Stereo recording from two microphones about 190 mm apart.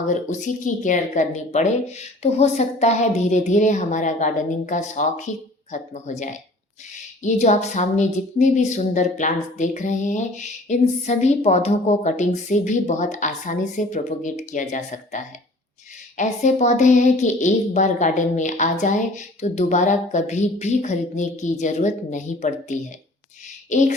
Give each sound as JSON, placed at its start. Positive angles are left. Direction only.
{"t": 0.1, "sound": "speech", "side_deg": 40}